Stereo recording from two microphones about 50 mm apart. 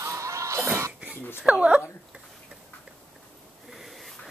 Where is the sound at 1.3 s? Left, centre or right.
Right.